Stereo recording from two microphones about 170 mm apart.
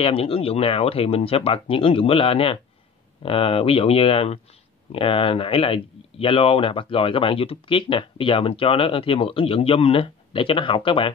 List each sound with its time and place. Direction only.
0.0 s speech: 35° left (ahead or behind)